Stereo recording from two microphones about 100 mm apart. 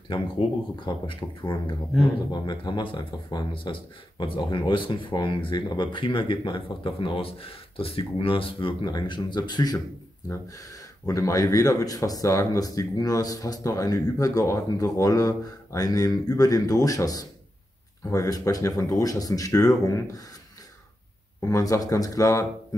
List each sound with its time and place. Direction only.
0.7 s speech: 55° left (ahead or behind); by 20.2 s 35° left (ahead or behind)
21.4 s speech: 30° left (ahead or behind)